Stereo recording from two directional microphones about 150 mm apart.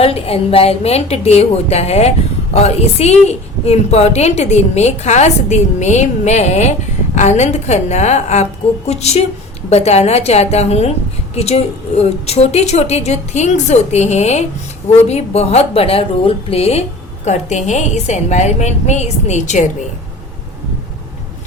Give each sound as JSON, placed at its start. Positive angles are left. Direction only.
{"t": 0.0, "sound": "a woman's voice", "side_deg": 40}